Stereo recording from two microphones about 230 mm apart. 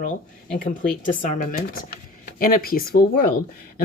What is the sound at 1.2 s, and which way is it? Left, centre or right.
Speech, left.